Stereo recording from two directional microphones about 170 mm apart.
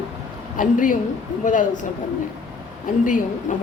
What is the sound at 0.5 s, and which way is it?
A woman's voice, 50° left (ahead or behind).